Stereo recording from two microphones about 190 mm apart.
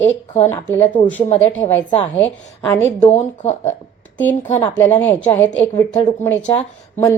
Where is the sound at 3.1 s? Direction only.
35° left (ahead or behind).